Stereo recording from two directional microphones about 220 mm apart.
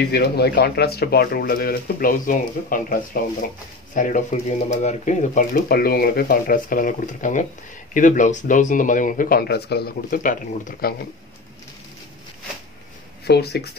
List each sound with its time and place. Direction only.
0.1 s speech: 45° left (ahead or behind)
13.2 s speech: 45° left (ahead or behind)